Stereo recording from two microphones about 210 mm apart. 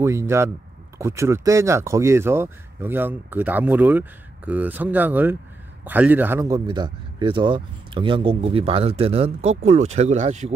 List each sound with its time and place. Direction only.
0.0 s speech: 15° right (ahead or behind); by 10.5 s 35° right (ahead or behind)